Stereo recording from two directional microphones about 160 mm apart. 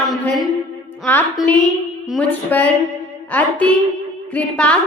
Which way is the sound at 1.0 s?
10° left (ahead or behind).